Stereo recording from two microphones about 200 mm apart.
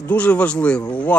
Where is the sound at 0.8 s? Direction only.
20° left (ahead or behind).